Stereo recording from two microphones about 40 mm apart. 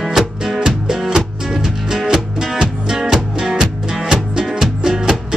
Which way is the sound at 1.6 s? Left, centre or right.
Centre.